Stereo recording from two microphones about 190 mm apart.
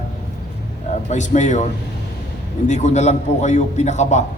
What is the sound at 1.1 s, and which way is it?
Speech, 40° left (ahead or behind).